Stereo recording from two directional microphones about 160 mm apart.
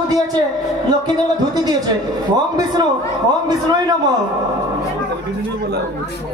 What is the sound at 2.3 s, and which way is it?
A man's voice, 25° right (ahead or behind).